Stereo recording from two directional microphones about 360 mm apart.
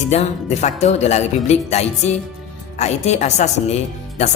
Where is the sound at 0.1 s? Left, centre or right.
Centre.